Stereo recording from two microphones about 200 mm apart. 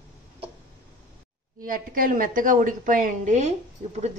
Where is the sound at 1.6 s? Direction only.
45° right (ahead or behind).